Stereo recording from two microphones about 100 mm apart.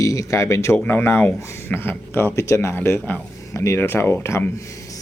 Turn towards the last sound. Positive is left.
turn(degrees=25)  # may be behind; listen again after turning